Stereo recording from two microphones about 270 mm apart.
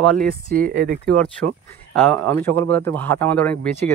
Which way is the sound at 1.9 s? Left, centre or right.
Centre.